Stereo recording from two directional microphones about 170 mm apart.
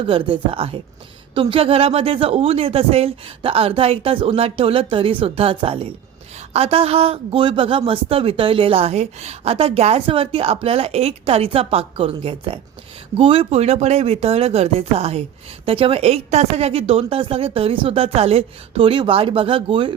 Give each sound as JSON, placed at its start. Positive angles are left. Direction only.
{"t": 0.1, "sound": "speech", "side_deg": -35}